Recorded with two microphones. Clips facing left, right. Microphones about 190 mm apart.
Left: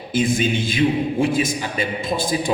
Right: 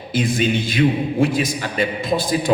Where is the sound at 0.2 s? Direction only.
60° right (ahead or behind).